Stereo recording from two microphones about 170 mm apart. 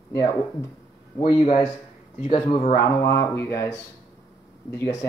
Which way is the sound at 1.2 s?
35° left (ahead or behind).